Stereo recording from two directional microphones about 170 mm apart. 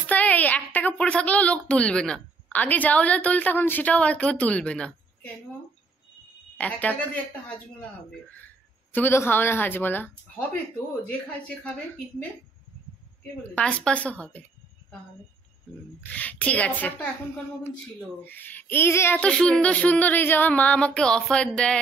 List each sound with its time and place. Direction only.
0.0 s a sound: 10° left (ahead or behind)
0.7 s speech: 10° left (ahead or behind)
6.6 s speech: 10° left (ahead or behind)
8.9 s speech: 15° left (ahead or behind)
13.4 s speech: 5° left (ahead or behind)
16.0 s speech: 10° left (ahead or behind)
18.2 s speech: 10° left (ahead or behind)